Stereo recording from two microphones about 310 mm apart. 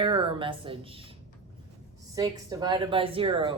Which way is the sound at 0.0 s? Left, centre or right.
Centre.